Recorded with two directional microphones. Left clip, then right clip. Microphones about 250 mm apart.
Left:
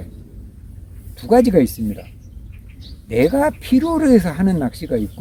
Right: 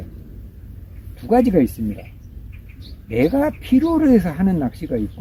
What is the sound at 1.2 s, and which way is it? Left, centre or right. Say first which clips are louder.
Speech: left 3 dB; centre.